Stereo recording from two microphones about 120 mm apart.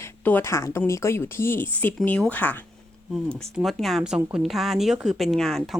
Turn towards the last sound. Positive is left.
turn(degrees=5)  # may be behind; listen again after turning